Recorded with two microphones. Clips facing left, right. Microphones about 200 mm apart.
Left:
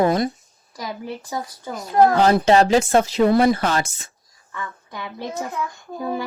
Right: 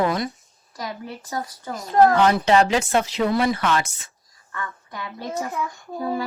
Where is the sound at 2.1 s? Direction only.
40° left (ahead or behind).